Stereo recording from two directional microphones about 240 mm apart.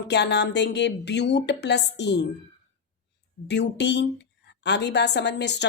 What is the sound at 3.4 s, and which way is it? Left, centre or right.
A woman's voice, left.